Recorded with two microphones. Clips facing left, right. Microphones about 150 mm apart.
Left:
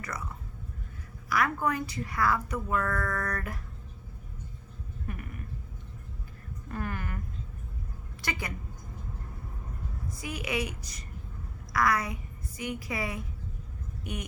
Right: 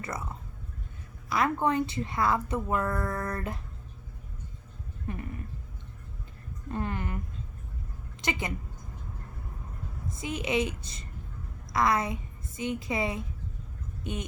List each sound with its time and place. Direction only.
0.0 s a woman's voice: 25° right (ahead or behind)
1.3 s a woman's voice: 25° right (ahead or behind)
5.0 s a woman's voice: 25° right (ahead or behind)
6.7 s a woman's voice: 25° right (ahead or behind)
8.2 s a woman's voice: 20° right (ahead or behind)
10.1 s a woman's voice: 25° right (ahead or behind)